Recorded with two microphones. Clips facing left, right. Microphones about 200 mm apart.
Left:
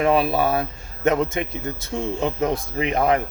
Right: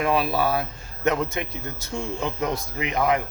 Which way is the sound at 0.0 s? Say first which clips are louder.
Left 4 dB; 25° left (ahead or behind).